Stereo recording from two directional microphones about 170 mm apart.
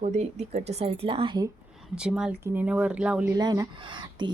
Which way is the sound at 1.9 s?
5° right (ahead or behind).